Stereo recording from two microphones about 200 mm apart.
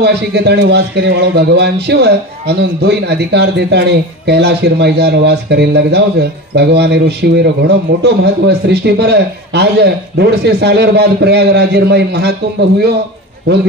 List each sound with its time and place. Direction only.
0.0 s speech: 55° right (ahead or behind)